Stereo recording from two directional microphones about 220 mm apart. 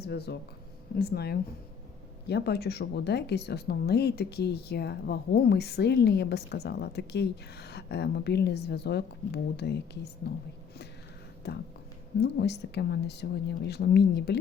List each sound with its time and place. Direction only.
0.0 s a woman's voice: 50° left (ahead or behind)
11.4 s a woman's voice: 50° left (ahead or behind)